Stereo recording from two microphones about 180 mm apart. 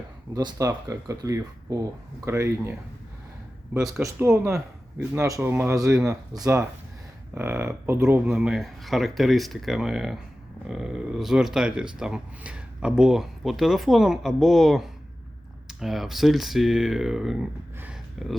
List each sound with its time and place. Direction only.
0.3 s speech: 20° right (ahead or behind)
3.8 s speech: 5° right (ahead or behind)